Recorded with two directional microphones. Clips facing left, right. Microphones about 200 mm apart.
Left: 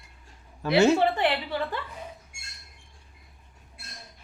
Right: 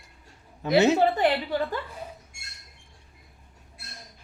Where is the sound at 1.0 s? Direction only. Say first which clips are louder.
Right 2 dB; 40° right (ahead or behind).